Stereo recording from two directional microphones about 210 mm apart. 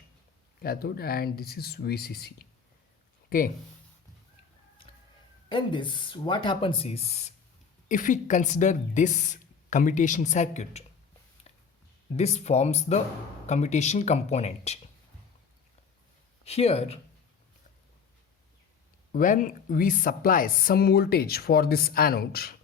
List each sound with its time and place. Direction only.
0.6 s a woman's voice: 45° left (ahead or behind)
5.5 s speech: 25° left (ahead or behind)
11.5 s a sound: 30° left (ahead or behind)
12.1 s speech: 30° left (ahead or behind)
16.4 s speech: 30° left (ahead or behind)
19.1 s a woman's voice: 40° left (ahead or behind)